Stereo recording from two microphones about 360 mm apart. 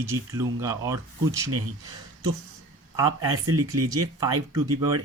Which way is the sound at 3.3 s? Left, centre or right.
Right.